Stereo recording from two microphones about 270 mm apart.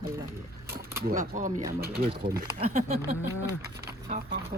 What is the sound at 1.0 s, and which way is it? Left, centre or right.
Speech, right.